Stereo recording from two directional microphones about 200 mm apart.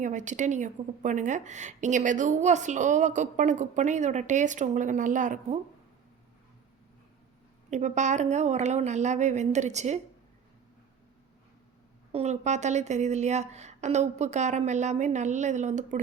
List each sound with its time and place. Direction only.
0.0 s a woman's voice: 40° right (ahead or behind)
7.7 s a woman's voice: 35° right (ahead or behind)
12.1 s a woman's voice: 35° right (ahead or behind)